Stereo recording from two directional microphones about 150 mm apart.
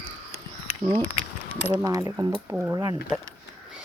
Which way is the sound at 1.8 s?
20° right (ahead or behind).